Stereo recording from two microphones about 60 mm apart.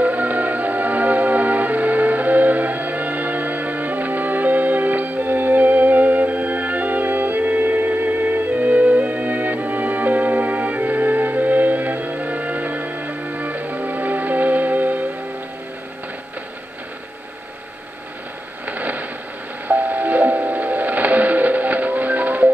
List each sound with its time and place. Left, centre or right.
0.0 s music: right
18.7 s a sound: right
19.7 s music: right